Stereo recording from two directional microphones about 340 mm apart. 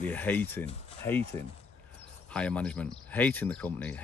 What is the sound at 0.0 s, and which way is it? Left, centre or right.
Speech, centre.